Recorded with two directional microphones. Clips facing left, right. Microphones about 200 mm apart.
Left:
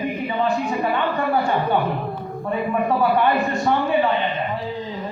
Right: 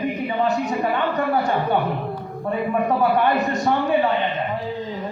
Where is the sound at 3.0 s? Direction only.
40° right (ahead or behind).